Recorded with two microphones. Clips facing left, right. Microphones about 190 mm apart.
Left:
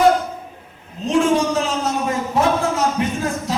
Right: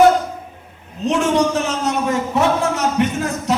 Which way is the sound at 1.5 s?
70° right (ahead or behind).